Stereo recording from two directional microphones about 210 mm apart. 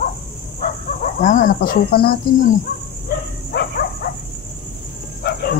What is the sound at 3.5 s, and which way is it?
Dog, 45° left (ahead or behind).